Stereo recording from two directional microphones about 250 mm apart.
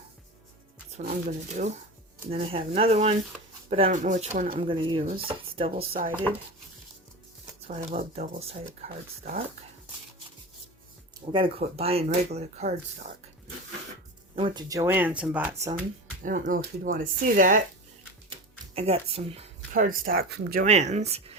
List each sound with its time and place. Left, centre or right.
0.9 s speech: right
4.6 s speech: right
7.7 s speech: right
11.3 s speech: right
14.3 s speech: centre
16.2 s speech: right
18.3 s speech: right